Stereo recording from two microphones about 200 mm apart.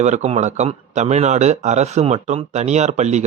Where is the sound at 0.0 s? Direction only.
35° right (ahead or behind).